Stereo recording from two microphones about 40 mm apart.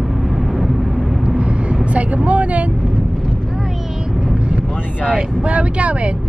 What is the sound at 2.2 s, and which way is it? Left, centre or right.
Speech, right.